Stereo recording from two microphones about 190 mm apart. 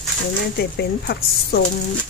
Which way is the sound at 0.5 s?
55° left (ahead or behind).